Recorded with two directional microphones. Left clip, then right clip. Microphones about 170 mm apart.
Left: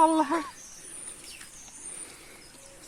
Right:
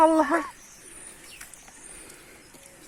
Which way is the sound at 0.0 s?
50° right (ahead or behind).